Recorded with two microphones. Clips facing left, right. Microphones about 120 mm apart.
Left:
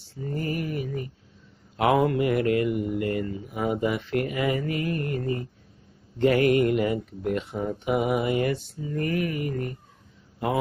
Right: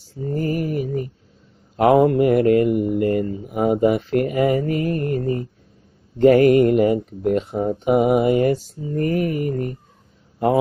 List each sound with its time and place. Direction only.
0.0 s mantra: 35° right (ahead or behind)
1.8 s speech: 40° right (ahead or behind)